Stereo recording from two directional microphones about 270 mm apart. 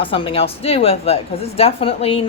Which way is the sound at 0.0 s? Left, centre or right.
Centre.